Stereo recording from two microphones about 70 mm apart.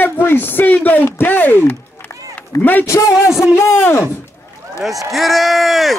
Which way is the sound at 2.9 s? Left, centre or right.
Left.